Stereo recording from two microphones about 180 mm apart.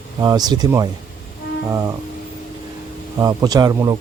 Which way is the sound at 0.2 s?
20° right (ahead or behind).